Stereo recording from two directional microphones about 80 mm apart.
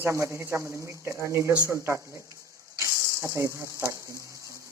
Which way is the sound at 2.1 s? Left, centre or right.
Right.